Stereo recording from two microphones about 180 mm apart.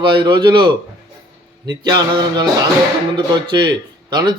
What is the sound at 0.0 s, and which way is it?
Speech, 25° right (ahead or behind).